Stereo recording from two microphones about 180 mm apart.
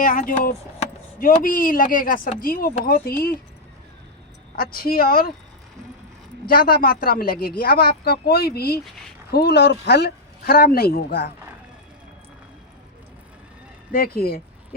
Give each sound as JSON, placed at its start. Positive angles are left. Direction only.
{"t": 0.0, "sound": "speech", "side_deg": 50}
{"t": 4.5, "sound": "speech", "side_deg": 55}
{"t": 6.5, "sound": "speech", "side_deg": 55}
{"t": 13.9, "sound": "speech", "side_deg": 55}